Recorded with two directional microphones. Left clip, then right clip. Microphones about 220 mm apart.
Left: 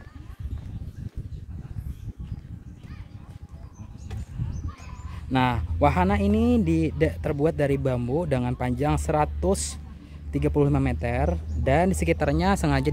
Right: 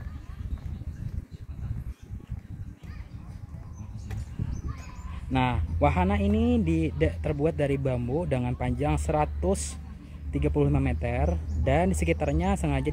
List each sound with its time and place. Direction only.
5.3 s speech: 20° left (ahead or behind)